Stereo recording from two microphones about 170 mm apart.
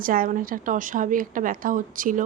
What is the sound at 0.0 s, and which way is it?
A woman's voice, 55° right (ahead or behind).